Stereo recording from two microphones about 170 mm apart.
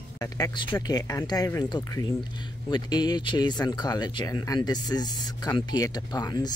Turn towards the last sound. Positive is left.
turn(degrees=25)  # may be behind; listen again after turning